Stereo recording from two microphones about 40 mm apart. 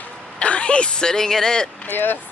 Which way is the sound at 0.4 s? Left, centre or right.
Left.